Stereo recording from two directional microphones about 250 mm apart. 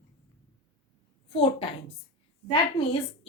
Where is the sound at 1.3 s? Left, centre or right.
Left.